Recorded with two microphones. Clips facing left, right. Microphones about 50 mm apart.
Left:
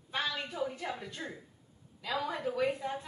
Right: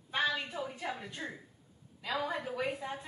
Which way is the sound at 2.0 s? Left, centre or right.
Centre.